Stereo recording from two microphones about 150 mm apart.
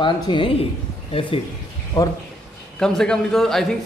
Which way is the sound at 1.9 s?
25° left (ahead or behind).